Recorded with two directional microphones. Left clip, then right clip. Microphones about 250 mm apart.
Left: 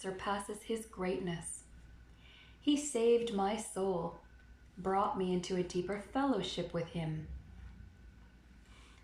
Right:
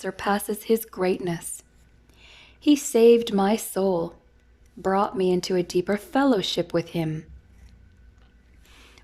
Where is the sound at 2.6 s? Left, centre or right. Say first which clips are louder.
Right 14 dB; right.